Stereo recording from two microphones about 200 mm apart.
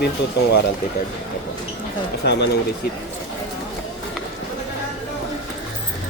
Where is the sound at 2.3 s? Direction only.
60° left (ahead or behind).